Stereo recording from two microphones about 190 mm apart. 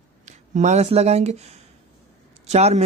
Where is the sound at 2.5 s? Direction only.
35° right (ahead or behind).